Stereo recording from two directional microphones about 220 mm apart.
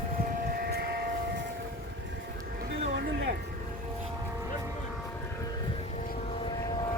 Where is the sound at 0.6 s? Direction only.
45° right (ahead or behind).